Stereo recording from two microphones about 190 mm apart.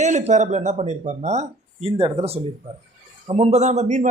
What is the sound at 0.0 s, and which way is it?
A man's voice, 40° right (ahead or behind).